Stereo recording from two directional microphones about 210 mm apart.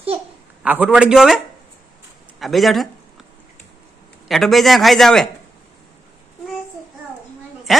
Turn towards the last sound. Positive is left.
turn(degrees=0)  # may be behind; listen again after turning